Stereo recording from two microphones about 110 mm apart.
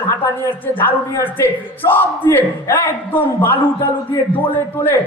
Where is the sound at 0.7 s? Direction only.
15° left (ahead or behind).